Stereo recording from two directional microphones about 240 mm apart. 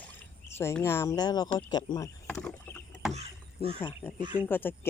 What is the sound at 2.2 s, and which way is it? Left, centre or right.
Rowboat, centre.